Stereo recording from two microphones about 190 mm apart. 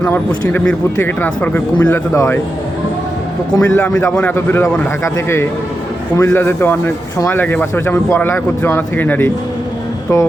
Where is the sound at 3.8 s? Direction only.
5° left (ahead or behind).